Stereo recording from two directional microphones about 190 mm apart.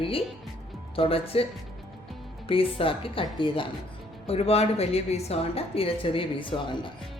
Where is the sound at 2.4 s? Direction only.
30° left (ahead or behind).